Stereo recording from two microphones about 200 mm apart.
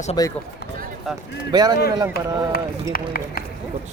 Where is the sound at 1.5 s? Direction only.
20° right (ahead or behind).